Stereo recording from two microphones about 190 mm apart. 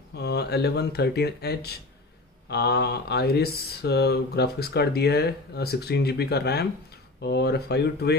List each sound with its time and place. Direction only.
0.1 s speech: 60° left (ahead or behind)